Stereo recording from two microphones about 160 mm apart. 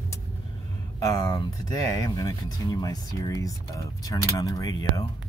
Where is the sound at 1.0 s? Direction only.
25° left (ahead or behind).